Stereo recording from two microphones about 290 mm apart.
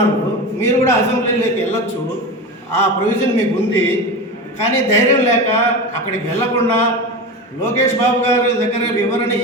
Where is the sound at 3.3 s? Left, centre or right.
Centre.